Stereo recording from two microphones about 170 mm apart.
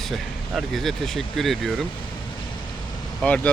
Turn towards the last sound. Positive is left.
turn(degrees=5)  # may be behind; listen again after turning